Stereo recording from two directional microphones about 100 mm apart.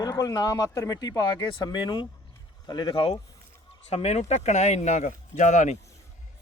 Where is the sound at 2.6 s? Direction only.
50° left (ahead or behind).